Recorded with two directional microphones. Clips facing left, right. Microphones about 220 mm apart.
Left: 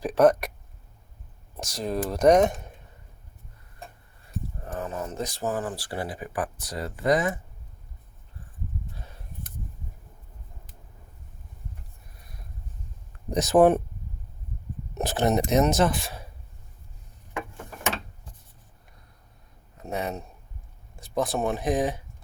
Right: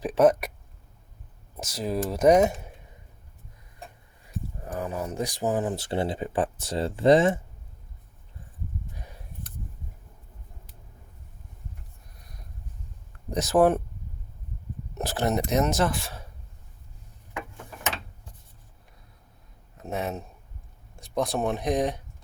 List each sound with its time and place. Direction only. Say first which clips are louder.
0.0 s speech: left 1 dB; centre (ahead or behind)
1.5 s speech: even; 5° right (ahead or behind)
4.6 s speech: right 2 dB; 10° right (ahead or behind); by 7.3 s 25° right (ahead or behind)
13.3 s speech: left 2 dB; 20° left (ahead or behind)
14.9 s speech: left 3 dB; 20° left (ahead or behind)
19.7 s speech: even; centre (ahead or behind)